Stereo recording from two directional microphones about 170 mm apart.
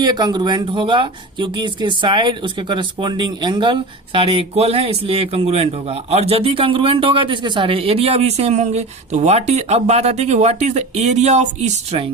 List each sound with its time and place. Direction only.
0.0 s speech: 25° right (ahead or behind); by 12.0 s 40° right (ahead or behind)